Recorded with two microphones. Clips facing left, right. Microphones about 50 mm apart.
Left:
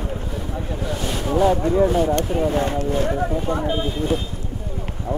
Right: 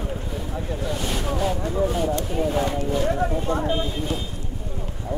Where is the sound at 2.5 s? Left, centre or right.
Left.